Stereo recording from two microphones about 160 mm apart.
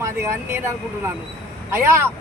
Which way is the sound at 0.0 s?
15° right (ahead or behind).